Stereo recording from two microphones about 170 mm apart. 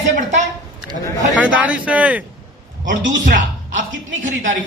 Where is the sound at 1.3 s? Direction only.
10° right (ahead or behind).